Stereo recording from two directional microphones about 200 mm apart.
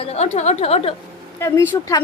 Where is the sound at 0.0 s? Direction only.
30° left (ahead or behind).